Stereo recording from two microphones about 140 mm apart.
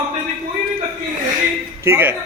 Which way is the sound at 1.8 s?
15° right (ahead or behind).